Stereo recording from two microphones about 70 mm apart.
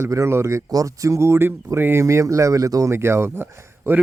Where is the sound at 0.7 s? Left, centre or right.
Right.